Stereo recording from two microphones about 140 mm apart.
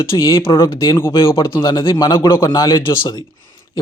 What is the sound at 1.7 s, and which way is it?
Speech, 35° left (ahead or behind).